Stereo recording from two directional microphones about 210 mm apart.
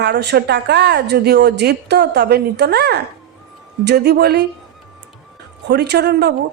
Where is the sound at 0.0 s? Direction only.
50° right (ahead or behind).